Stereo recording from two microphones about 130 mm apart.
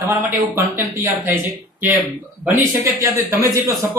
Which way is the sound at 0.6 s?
15° right (ahead or behind).